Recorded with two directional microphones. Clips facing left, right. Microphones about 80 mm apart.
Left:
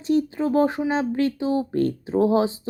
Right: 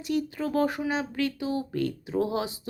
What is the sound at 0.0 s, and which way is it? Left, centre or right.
Speech, left.